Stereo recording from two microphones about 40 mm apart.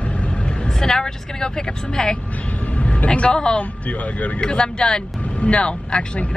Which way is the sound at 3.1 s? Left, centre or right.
Left.